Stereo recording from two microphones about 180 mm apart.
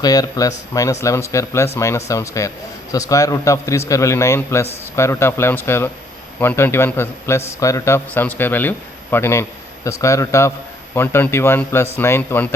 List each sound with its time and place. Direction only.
0.0 s a man's voice: 20° left (ahead or behind)